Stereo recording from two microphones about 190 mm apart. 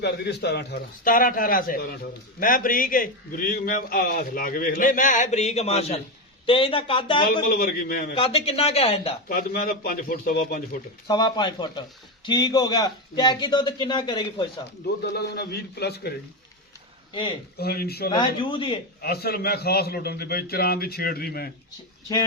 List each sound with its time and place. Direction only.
0.0 s a man's voice: 60° left (ahead or behind); by 7.3 s 25° left (ahead or behind)
7.4 s a man's voice: 50° left (ahead or behind)
8.1 s speech: 30° left (ahead or behind)
9.3 s a man's voice: 55° left (ahead or behind)
11.1 s a man's voice: 25° left (ahead or behind)
15.0 s a man's voice: 60° left (ahead or behind)
17.6 s a man's voice: 55° left (ahead or behind)
18.1 s a man's voice: 25° left (ahead or behind)
19.0 s a man's voice: 55° left (ahead or behind)